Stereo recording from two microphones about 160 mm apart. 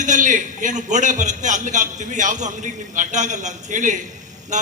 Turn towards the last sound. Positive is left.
turn(degrees=-50)  # may be behind; listen again after turning